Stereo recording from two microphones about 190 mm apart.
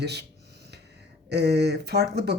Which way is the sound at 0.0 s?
60° right (ahead or behind).